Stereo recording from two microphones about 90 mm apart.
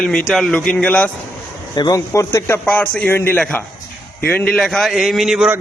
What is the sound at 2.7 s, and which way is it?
Speech, 10° left (ahead or behind).